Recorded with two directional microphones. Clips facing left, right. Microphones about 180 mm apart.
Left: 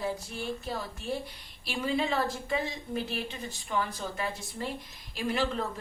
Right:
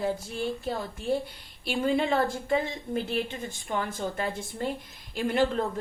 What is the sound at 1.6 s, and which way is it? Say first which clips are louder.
Speech: right 4 dB; 55° right (ahead or behind).